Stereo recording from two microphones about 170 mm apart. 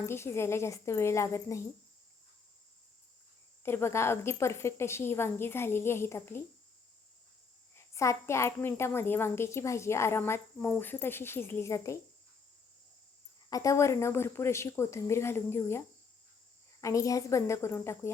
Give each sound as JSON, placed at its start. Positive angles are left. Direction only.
{"t": 0.0, "sound": "a woman's voice", "side_deg": 15}
{"t": 3.6, "sound": "a woman's voice", "side_deg": 15}
{"t": 7.9, "sound": "a woman's voice", "side_deg": 15}
{"t": 13.5, "sound": "a woman's voice", "side_deg": 20}
{"t": 16.8, "sound": "a woman's voice", "side_deg": 20}